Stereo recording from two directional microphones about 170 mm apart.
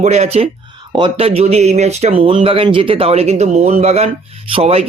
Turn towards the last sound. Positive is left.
turn(degrees=-35)  # may be behind; listen again after turning